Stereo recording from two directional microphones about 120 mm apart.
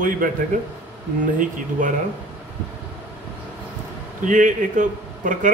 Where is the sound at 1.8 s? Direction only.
90° right.